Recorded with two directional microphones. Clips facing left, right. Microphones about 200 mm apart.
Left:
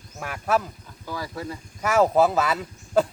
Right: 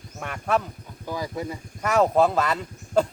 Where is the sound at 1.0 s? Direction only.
20° right (ahead or behind).